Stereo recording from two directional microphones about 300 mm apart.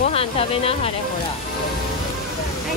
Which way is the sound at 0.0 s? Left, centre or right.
Centre.